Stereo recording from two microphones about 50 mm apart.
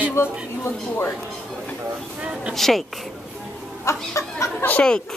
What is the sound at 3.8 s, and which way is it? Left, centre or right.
Chicken, left.